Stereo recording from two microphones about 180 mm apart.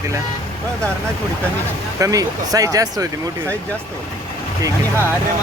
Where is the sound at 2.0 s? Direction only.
20° right (ahead or behind).